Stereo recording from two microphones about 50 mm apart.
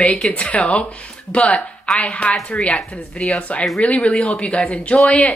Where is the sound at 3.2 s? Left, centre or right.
Left.